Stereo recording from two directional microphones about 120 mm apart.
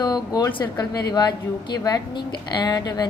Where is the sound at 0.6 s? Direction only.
35° left (ahead or behind).